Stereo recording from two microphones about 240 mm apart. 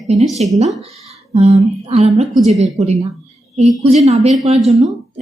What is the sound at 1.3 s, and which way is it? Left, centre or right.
A woman's voice, right.